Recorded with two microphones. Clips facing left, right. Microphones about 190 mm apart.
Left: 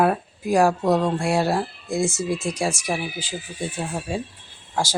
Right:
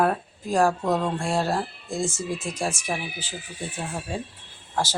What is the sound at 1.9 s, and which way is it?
Speech, 75° left (ahead or behind).